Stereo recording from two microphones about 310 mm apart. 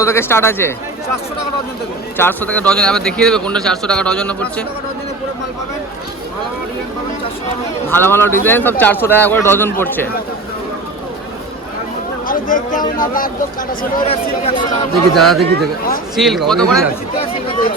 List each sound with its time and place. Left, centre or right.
0.0 s speech: centre
2.1 s a man's voice: centre
7.9 s speech: centre
12.3 s speech: left
15.1 s a man's voice: centre